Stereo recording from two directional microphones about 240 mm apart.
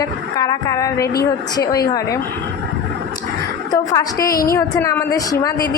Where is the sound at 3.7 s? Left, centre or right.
Centre.